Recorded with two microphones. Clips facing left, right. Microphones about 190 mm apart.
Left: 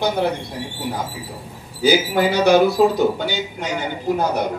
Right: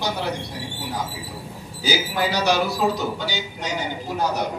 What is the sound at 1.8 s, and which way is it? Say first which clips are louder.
Speech: left 7 dB; 55° left (ahead or behind).